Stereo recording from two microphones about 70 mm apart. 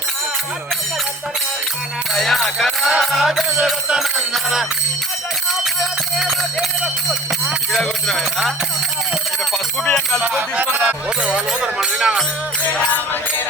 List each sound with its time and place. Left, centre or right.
2.1 s music: centre
6.1 s music: centre
10.3 s music: right